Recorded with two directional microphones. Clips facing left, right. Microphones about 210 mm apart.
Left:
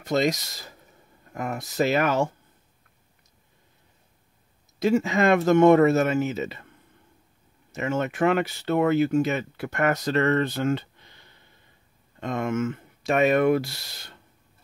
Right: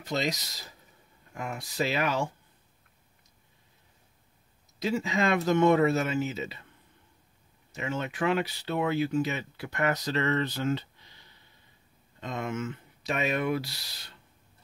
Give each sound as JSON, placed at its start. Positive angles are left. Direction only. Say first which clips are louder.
{"t": 0.0, "sound": "speech", "louder": "left 7 dB", "side_deg": 50}
{"t": 4.7, "sound": "speech", "louder": "left 7 dB", "side_deg": 50}
{"t": 7.7, "sound": "speech", "louder": "left 7 dB", "side_deg": 50}